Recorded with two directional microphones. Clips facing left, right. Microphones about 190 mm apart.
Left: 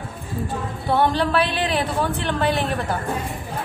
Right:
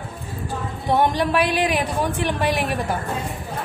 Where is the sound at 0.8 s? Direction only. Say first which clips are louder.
Even; 15° right (ahead or behind).